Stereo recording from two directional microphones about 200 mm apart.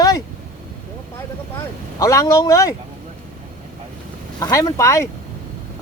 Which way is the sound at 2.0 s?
15° left (ahead or behind).